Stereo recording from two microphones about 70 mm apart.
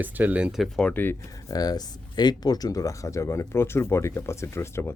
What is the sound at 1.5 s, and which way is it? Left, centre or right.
Speech, left.